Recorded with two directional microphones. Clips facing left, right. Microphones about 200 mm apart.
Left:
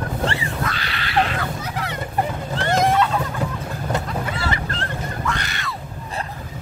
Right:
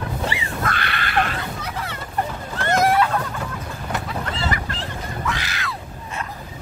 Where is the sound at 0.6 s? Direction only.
55° right (ahead or behind).